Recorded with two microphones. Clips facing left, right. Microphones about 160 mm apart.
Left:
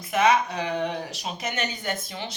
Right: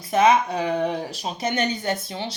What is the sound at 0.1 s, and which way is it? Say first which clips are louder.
Speech: right 3 dB; 30° right (ahead or behind).